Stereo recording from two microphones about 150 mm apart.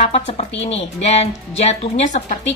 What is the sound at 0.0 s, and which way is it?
A woman's voice, 45° left (ahead or behind).